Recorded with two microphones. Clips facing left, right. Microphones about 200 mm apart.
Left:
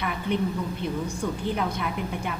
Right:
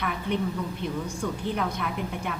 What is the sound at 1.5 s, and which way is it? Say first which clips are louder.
Speech: left 1 dB; 5° left (ahead or behind).